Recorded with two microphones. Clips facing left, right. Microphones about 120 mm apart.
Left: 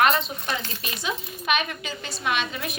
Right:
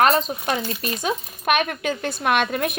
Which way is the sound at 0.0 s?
40° right (ahead or behind).